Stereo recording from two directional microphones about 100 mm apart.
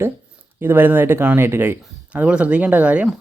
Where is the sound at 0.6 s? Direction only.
20° right (ahead or behind).